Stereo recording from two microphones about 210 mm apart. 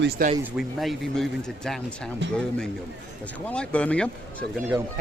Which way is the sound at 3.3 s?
5° left (ahead or behind).